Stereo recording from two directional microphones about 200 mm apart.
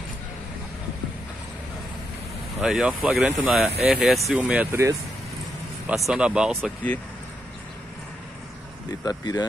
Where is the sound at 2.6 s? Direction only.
Centre (ahead or behind).